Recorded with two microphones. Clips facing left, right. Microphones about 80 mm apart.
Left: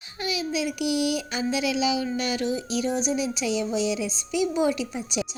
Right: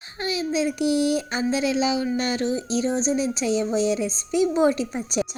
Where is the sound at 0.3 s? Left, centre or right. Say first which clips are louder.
Right 4 dB; right.